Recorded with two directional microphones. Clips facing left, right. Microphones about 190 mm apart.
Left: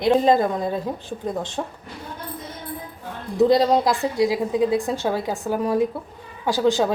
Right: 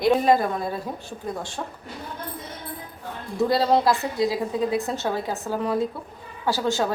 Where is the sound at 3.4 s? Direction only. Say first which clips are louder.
Left 3 dB; 15° left (ahead or behind).